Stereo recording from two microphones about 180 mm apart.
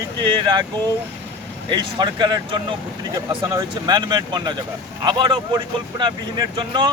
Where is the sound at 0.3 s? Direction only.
25° right (ahead or behind).